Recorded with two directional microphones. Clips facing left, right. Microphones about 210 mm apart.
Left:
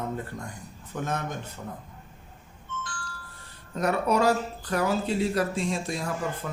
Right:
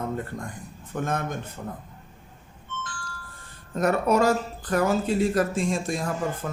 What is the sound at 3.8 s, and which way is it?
Speech, 45° right (ahead or behind).